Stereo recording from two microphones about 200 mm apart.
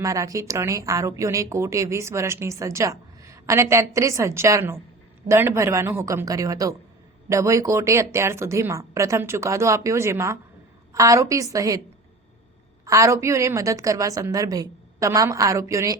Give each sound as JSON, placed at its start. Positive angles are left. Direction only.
{"t": 0.0, "sound": "a woman's voice", "side_deg": -15}
{"t": 12.8, "sound": "a woman's voice", "side_deg": -15}